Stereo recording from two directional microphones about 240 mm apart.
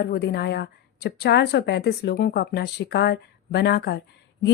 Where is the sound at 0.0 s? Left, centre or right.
Left.